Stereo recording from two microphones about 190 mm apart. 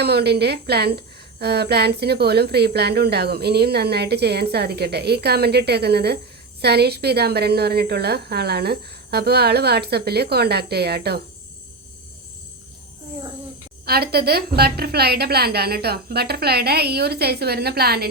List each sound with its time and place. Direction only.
0.0 s a woman's voice: 60° right (ahead or behind)
13.8 s a woman's voice: 55° right (ahead or behind)